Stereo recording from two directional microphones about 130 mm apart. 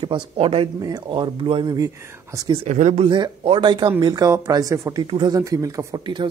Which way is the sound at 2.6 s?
65° right (ahead or behind).